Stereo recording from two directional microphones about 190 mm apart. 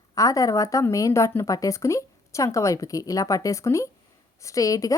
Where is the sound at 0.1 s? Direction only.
20° left (ahead or behind).